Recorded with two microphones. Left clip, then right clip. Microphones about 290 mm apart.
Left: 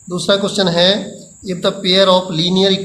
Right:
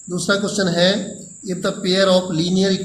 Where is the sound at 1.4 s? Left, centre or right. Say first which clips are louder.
Left 5 dB; left.